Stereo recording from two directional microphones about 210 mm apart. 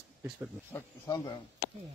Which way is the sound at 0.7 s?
20° left (ahead or behind).